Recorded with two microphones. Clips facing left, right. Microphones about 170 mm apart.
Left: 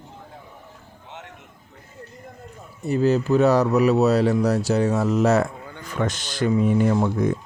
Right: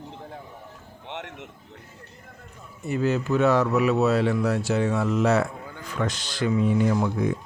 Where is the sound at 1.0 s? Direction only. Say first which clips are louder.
Right 5 dB; 75° right (ahead or behind).